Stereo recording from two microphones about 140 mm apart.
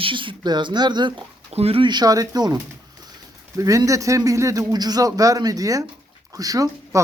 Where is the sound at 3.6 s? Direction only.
25° right (ahead or behind).